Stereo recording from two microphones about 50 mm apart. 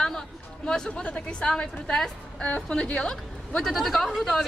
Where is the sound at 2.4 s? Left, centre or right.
Left.